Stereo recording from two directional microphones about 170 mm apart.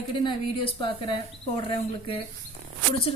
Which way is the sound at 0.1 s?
30° left (ahead or behind).